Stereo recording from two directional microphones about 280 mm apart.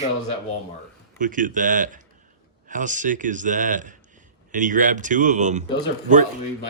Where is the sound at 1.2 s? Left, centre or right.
Right.